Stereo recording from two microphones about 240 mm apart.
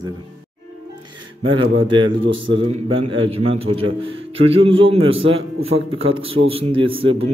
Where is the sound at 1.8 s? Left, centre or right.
Right.